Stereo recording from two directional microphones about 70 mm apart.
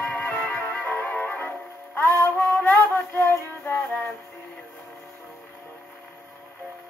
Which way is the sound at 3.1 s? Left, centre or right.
Left.